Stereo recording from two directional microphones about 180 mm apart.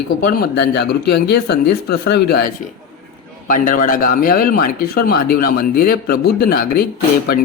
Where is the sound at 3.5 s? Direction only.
45° left (ahead or behind).